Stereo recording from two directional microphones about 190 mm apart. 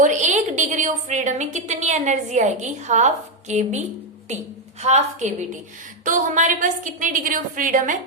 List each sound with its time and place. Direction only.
0.0 s a woman's voice: 40° right (ahead or behind)